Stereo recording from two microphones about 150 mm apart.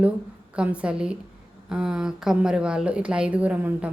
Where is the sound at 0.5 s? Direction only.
10° right (ahead or behind).